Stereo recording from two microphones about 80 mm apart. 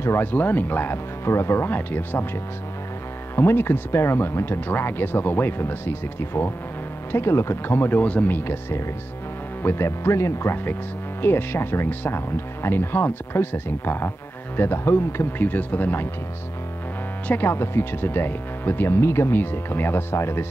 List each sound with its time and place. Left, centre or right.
0.0 s speech: left
3.3 s speech: left
17.3 s speech: left